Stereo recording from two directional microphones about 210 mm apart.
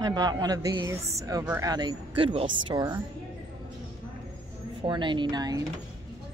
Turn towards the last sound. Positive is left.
turn(degrees=-20)  # may be behind; listen again after turning